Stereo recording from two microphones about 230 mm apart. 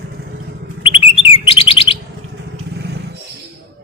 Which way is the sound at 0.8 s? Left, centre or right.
Left.